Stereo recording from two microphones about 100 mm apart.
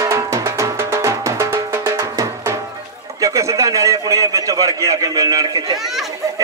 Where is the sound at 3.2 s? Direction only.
35° right (ahead or behind).